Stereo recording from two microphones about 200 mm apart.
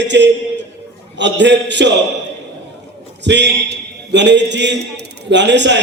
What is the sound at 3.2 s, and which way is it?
A man's voice, 60° right (ahead or behind).